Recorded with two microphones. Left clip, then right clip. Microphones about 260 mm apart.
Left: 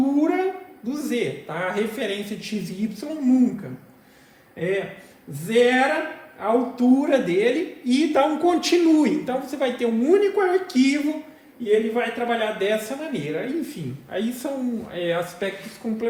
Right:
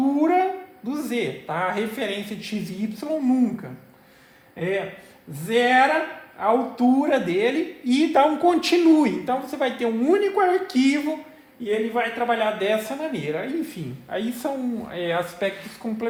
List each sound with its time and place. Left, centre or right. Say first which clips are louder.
0.1 s a sound: right 2 dB; right
0.9 s a woman's voice: left 1 dB; right
4.5 s a man's voice: left 1 dB; right